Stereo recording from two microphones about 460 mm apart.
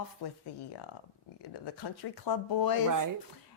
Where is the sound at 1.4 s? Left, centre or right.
Left.